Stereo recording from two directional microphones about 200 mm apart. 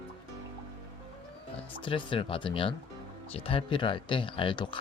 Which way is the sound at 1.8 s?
25° left (ahead or behind).